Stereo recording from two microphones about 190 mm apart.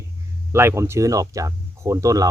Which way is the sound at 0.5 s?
15° right (ahead or behind).